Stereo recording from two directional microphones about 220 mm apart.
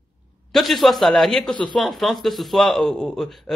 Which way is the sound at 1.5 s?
20° left (ahead or behind).